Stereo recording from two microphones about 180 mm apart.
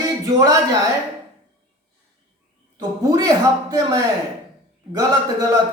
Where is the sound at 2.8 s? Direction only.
20° right (ahead or behind).